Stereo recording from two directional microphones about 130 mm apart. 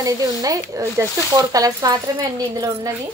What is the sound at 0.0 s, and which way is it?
Speech, 25° right (ahead or behind).